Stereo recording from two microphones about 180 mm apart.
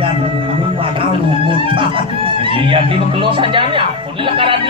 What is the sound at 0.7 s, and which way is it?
Speech, 30° right (ahead or behind).